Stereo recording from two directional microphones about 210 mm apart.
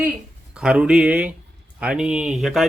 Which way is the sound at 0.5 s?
5° right (ahead or behind).